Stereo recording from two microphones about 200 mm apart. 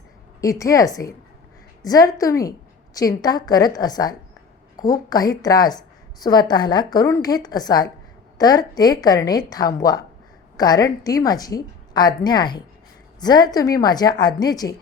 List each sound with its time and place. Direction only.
0.4 s a woman's voice: 15° left (ahead or behind)